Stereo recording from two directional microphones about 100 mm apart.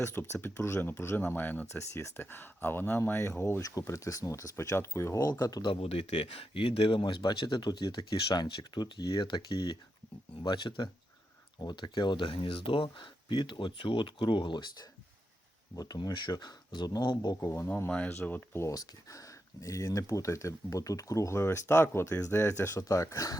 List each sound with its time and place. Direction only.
0.0 s speech: 25° left (ahead or behind); by 5.7 s 40° left (ahead or behind)
5.7 s speech: 85° left; by 14.8 s 50° left (ahead or behind)
15.7 s speech: 40° left (ahead or behind)
17.7 s speech: 15° left (ahead or behind)
18.7 s speech: 35° left (ahead or behind)